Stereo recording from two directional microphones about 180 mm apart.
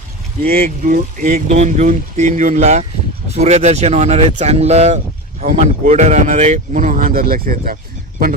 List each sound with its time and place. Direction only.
0.4 s speech: 55° right (ahead or behind)